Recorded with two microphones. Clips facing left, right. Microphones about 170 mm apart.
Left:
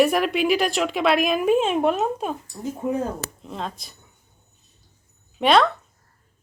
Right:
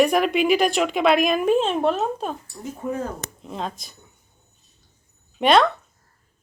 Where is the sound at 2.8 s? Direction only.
20° left (ahead or behind).